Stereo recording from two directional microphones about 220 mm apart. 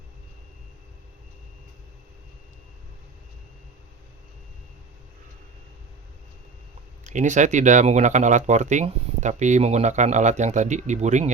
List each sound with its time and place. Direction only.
7.0 s speech: 35° right (ahead or behind)